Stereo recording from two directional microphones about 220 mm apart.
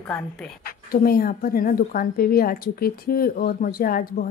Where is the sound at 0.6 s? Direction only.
40° left (ahead or behind).